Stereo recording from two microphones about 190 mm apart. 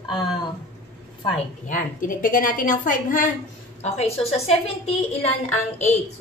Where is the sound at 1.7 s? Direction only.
45° left (ahead or behind).